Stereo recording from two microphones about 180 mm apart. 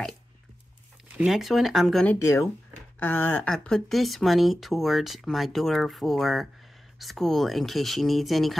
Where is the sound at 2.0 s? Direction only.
15° left (ahead or behind).